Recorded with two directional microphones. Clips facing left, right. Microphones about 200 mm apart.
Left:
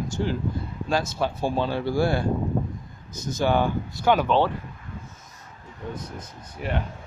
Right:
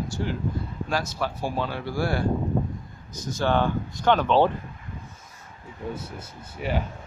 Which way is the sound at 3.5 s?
10° left (ahead or behind).